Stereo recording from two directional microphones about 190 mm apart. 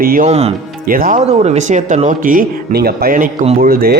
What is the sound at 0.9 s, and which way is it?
Speech, 50° right (ahead or behind).